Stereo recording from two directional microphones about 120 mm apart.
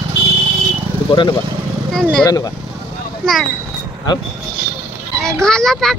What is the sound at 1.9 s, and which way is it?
Speech, 5° left (ahead or behind).